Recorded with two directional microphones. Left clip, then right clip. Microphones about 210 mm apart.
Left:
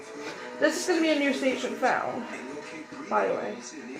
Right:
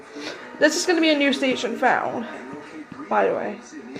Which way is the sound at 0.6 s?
55° right (ahead or behind).